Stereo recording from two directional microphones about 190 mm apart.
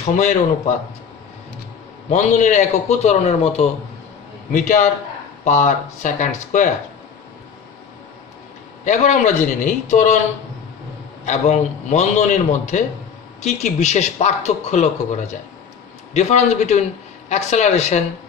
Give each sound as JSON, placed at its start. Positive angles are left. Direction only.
{"t": 0.0, "sound": "a man's voice", "side_deg": 40}
{"t": 2.0, "sound": "a man's voice", "side_deg": 40}
{"t": 8.8, "sound": "a man's voice", "side_deg": 40}
{"t": 11.2, "sound": "a man's voice", "side_deg": 35}